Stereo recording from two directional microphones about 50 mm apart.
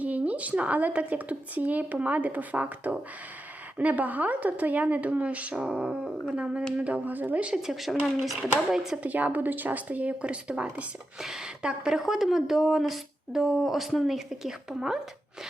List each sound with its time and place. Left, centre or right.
0.0 s speech: right
5.5 s speech: centre; by 7.4 s right
7.5 s speech: centre
9.0 s speech: right
11.2 s speech: centre
11.6 s speech: centre
11.9 s speech: centre